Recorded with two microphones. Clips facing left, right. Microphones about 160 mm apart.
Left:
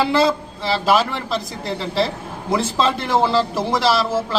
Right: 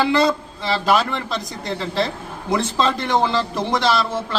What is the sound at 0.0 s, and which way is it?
A man's voice, 5° left (ahead or behind).